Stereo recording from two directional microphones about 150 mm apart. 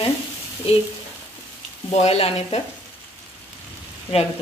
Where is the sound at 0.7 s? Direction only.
40° left (ahead or behind).